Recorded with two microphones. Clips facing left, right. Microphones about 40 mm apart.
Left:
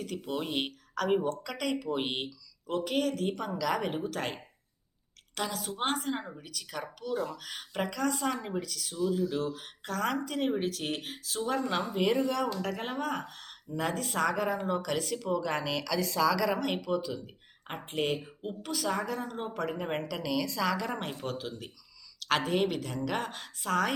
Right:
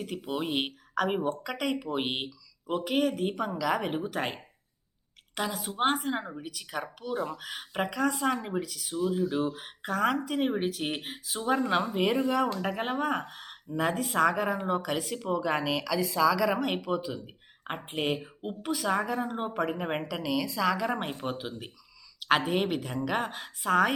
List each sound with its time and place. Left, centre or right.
0.0 s speech: centre